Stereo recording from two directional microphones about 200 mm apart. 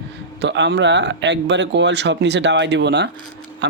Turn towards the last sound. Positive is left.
turn(degrees=-60)  # may be behind; listen again after turning